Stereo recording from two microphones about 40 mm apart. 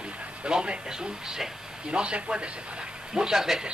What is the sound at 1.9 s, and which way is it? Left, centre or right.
Speech, right.